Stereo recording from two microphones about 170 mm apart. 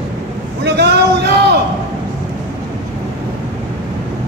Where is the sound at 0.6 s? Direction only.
75° right (ahead or behind).